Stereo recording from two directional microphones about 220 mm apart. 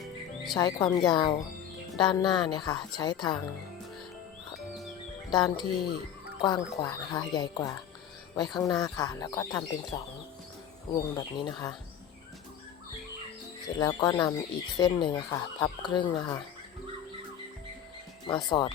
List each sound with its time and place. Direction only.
0.5 s speech: 20° left (ahead or behind)
5.3 s speech: 20° left (ahead or behind)
13.7 s speech: 15° left (ahead or behind)
18.3 s speech: 20° left (ahead or behind)